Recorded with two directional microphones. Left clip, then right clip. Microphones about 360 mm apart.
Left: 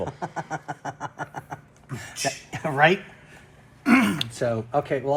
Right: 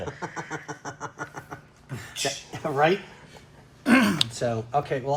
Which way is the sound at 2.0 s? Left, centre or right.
Left.